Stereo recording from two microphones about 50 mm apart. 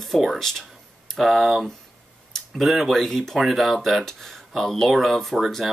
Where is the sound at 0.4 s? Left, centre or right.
Centre.